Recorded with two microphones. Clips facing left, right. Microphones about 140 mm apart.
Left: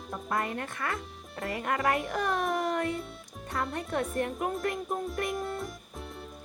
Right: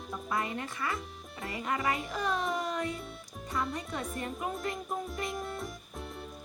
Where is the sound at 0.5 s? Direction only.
55° left (ahead or behind).